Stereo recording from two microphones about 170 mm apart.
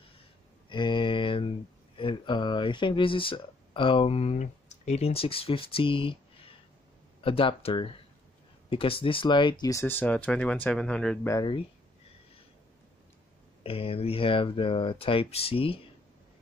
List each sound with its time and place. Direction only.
0.7 s a sound: 30° left (ahead or behind)
2.0 s speech: 30° left (ahead or behind); by 11.1 s 5° left (ahead or behind)
11.2 s speech: 20° left (ahead or behind)
13.7 s speech: 35° left (ahead or behind)